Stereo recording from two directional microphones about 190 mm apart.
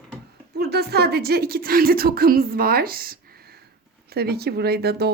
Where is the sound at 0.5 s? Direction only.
55° right (ahead or behind).